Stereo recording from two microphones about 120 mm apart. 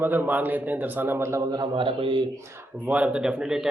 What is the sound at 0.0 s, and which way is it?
A man's voice, 15° right (ahead or behind).